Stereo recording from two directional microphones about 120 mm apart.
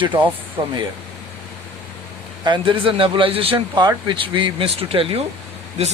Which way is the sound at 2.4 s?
40° right (ahead or behind).